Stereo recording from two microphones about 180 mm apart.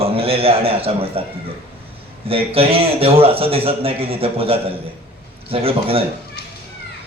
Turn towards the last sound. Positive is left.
turn(degrees=-30)  # may be behind; listen again after turning